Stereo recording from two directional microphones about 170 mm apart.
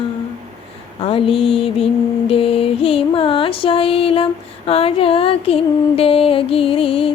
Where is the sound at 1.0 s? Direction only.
35° left (ahead or behind).